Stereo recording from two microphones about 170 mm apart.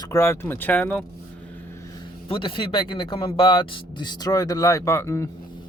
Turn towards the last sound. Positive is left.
turn(degrees=15)  # may be behind; listen again after turning